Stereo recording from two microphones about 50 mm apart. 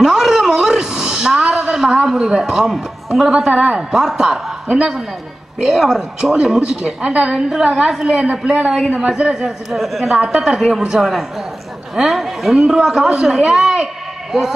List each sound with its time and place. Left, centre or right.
0.0 s a sound: centre
5.6 s a woman's voice: centre
7.3 s a man's voice: centre